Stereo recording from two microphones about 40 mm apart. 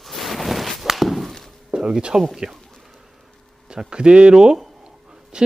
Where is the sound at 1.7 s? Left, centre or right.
Right.